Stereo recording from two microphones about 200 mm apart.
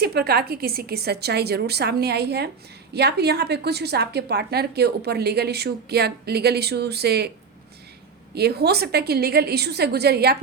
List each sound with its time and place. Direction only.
0.0 s a woman's voice: 50° right (ahead or behind)
8.4 s a woman's voice: 55° right (ahead or behind)